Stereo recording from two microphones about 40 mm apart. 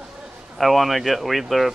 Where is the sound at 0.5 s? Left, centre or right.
Centre.